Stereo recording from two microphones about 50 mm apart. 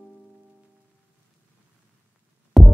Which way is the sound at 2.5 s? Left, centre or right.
Centre.